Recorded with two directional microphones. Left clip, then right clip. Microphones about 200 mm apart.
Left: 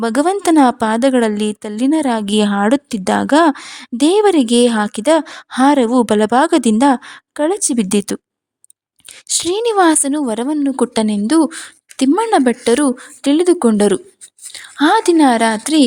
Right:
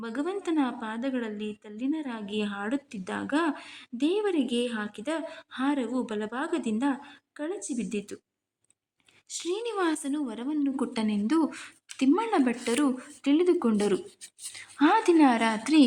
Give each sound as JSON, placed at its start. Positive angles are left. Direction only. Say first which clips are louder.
{"t": 0.0, "sound": "a woman's voice", "louder": "left 18 dB", "side_deg": 60}